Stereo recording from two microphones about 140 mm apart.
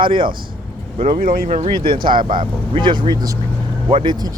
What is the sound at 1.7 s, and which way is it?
Speech, 35° right (ahead or behind).